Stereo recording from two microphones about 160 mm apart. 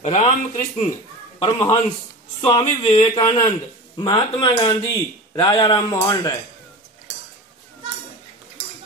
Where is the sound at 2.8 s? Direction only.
25° left (ahead or behind).